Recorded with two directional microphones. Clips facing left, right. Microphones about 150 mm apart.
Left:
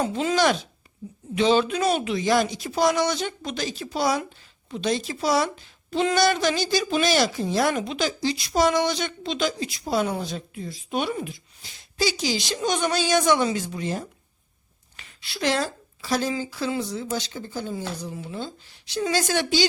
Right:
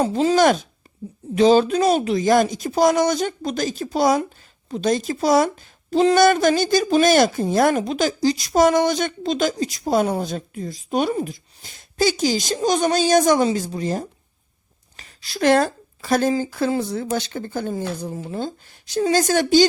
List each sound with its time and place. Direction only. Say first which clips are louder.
0.0 s a woman's voice: right 6 dB; 35° right (ahead or behind)